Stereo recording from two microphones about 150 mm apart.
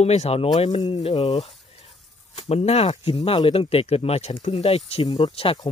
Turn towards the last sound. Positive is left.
turn(degrees=40)  # may be behind; listen again after turning